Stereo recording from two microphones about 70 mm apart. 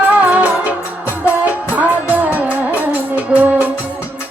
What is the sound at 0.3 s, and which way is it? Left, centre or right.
Music, right.